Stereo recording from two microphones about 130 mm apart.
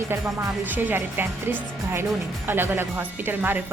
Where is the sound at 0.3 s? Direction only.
15° right (ahead or behind).